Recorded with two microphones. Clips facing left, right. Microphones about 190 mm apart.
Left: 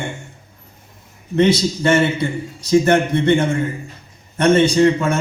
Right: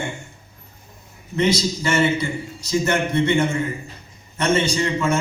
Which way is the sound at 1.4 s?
60° left (ahead or behind).